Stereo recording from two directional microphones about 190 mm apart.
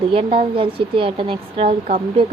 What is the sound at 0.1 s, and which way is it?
A woman's voice, 30° right (ahead or behind).